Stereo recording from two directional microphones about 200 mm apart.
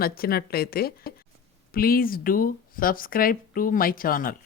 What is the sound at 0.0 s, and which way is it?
Speech, 50° left (ahead or behind).